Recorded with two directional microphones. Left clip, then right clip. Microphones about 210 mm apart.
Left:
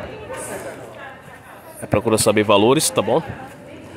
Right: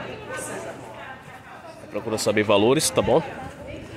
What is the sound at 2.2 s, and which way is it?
Speech, 25° left (ahead or behind).